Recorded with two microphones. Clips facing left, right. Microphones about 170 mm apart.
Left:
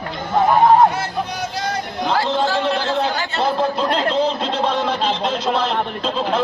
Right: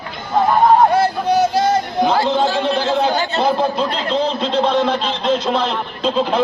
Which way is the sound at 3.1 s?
20° right (ahead or behind).